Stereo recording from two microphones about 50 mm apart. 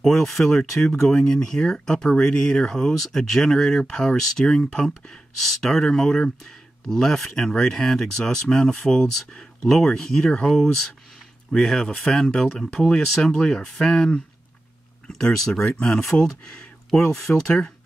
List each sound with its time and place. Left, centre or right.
0.0 s speech: centre
12.0 s speech: centre
12.8 s speech: centre
13.2 s speech: centre